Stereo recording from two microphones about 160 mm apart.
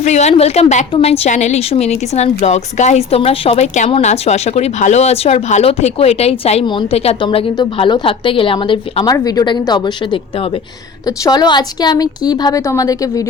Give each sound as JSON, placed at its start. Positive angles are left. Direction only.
{"t": 0.0, "sound": "a woman's voice", "side_deg": 45}
{"t": 11.0, "sound": "a woman's voice", "side_deg": 25}